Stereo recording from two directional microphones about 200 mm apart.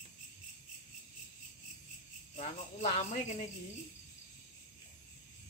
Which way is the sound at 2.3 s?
35° left (ahead or behind).